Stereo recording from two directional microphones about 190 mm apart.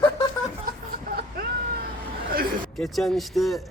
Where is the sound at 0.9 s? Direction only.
50° right (ahead or behind).